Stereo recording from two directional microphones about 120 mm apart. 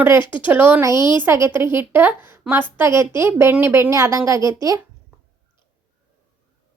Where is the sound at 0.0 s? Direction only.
15° right (ahead or behind).